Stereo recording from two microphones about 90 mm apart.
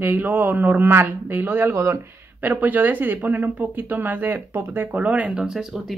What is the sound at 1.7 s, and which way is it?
Speech, 35° right (ahead or behind).